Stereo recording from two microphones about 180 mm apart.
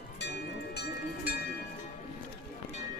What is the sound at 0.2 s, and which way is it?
Music, 70° left (ahead or behind).